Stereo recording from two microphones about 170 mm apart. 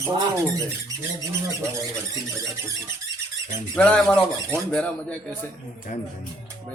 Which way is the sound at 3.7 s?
5° left (ahead or behind).